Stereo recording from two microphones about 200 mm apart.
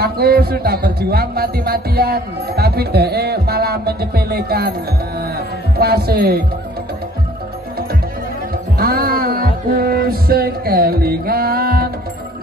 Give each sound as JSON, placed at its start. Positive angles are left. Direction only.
{"t": 0.0, "sound": "a man's voice", "side_deg": -50}
{"t": 5.8, "sound": "a man's voice", "side_deg": -50}
{"t": 8.7, "sound": "music", "side_deg": -50}